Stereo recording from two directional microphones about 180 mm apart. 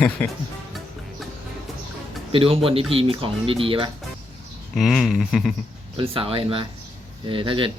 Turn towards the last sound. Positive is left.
turn(degrees=-30)  # may be behind; listen again after turning